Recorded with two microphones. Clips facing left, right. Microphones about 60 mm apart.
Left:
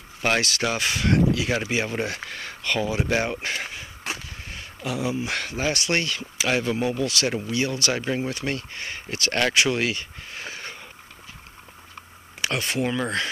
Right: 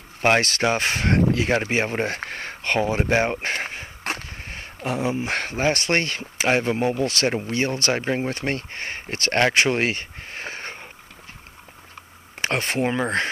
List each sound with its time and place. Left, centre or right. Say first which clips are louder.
0.2 s speech: right 4 dB; right
12.4 s speech: right 2 dB; right